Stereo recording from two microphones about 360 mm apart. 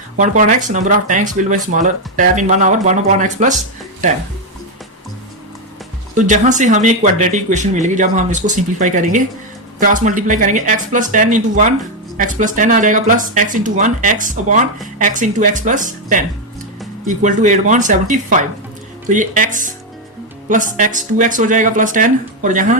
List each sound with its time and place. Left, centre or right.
0.2 s speech: right
6.1 s speech: right